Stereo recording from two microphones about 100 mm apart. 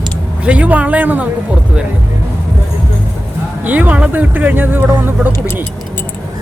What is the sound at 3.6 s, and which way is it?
Speech, 15° right (ahead or behind).